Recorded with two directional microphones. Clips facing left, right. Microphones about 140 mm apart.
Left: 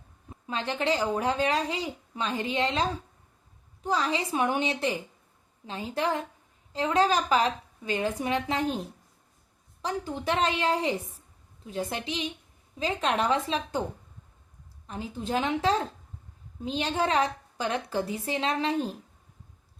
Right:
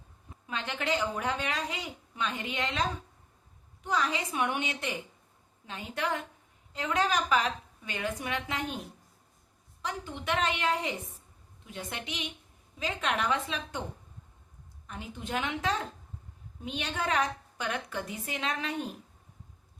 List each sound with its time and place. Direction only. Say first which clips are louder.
0.3 s a woman's voice: left 5 dB; 30° left (ahead or behind)
14.8 s a woman's voice: left 6 dB; 30° left (ahead or behind)